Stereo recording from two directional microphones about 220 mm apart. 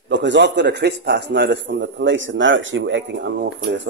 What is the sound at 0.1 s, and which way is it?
A man's voice, 55° right (ahead or behind).